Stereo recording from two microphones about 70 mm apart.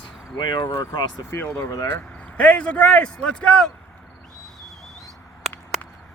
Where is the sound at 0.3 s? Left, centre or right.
Left.